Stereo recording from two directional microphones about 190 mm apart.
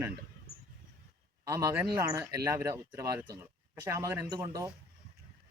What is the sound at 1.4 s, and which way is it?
Speech, 15° right (ahead or behind).